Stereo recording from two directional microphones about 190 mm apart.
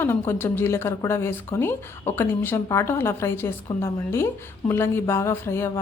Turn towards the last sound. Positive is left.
turn(degrees=15)  # may be behind; listen again after turning